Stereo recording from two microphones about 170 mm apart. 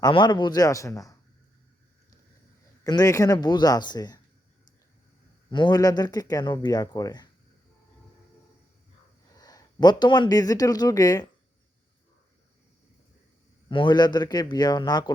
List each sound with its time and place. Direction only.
0.0 s speech: 25° left (ahead or behind)
2.8 s speech: 20° left (ahead or behind)
5.5 s speech: 25° left (ahead or behind)
9.3 s speech: 20° left (ahead or behind)
13.7 s speech: 30° left (ahead or behind)